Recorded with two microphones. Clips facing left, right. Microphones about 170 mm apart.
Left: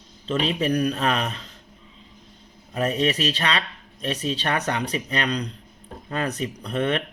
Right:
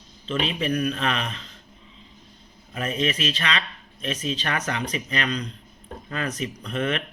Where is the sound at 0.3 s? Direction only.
40° left (ahead or behind).